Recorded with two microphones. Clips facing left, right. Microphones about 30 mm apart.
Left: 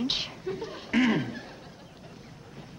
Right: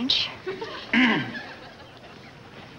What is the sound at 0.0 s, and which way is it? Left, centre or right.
Speech, right.